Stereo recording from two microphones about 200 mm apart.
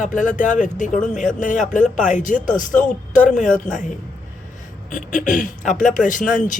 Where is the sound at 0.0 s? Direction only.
40° left (ahead or behind).